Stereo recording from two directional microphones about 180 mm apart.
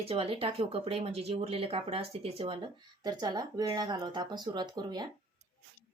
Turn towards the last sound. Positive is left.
turn(degrees=-25)  # may be behind; listen again after turning